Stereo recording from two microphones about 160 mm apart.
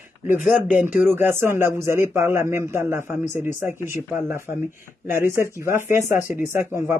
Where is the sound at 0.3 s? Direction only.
10° right (ahead or behind).